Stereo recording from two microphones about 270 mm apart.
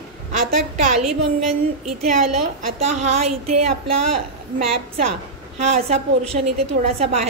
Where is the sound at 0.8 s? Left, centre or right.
Right.